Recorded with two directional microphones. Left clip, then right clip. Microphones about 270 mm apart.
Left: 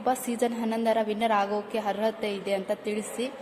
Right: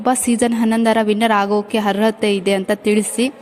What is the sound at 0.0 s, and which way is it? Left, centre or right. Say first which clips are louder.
A woman's voice: right 10 dB; right.